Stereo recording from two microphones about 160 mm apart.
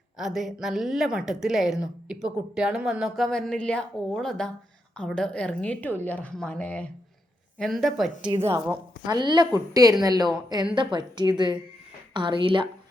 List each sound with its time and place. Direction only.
0.2 s a woman's voice: centre (ahead or behind)
8.7 s a woman's voice: 25° right (ahead or behind)